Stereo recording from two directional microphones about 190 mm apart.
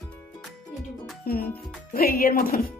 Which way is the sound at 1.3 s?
50° left (ahead or behind).